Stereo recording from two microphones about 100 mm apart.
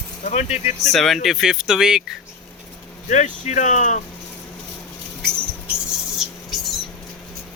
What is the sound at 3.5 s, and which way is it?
Speech, 90° left.